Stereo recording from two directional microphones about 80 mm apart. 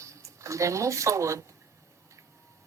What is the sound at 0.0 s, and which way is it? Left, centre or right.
Speech, right.